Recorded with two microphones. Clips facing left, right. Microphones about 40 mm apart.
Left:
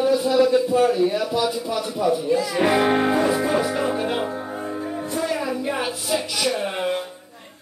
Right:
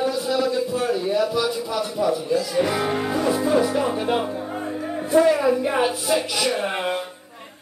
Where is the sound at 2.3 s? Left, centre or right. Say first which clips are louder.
Left 2 dB; left.